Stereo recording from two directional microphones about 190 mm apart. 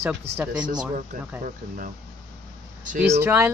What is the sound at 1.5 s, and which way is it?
Speech, 45° right (ahead or behind).